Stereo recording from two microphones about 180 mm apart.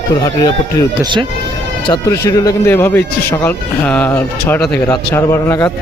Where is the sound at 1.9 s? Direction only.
20° left (ahead or behind).